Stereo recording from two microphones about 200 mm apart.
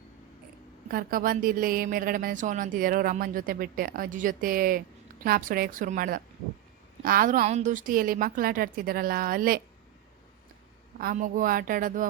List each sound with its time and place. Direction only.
0.9 s a woman's voice: 45° right (ahead or behind)
10.9 s a woman's voice: 45° right (ahead or behind)